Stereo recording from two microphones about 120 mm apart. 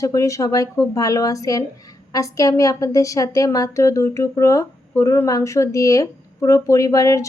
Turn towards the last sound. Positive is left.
turn(degrees=25)  # may be behind; listen again after turning